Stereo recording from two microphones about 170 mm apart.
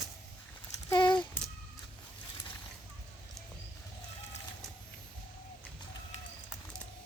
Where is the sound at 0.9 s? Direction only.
25° left (ahead or behind).